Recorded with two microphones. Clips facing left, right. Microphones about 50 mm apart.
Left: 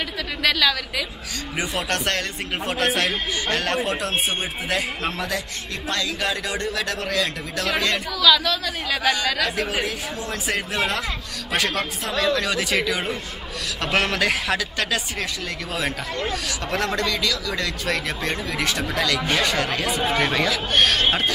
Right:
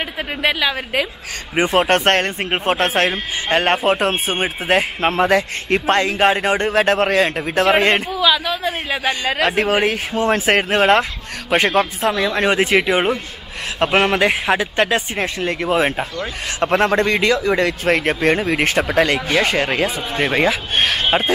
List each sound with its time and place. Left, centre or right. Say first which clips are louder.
0.4 s speech: right 2 dB; right